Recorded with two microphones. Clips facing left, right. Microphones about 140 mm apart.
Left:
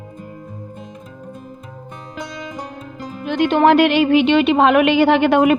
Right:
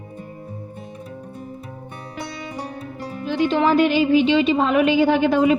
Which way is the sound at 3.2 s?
65° left (ahead or behind).